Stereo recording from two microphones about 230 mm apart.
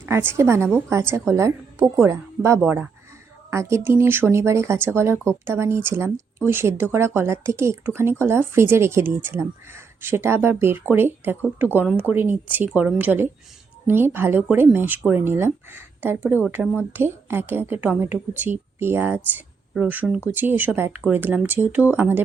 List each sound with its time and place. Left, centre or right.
0.0 s speech: centre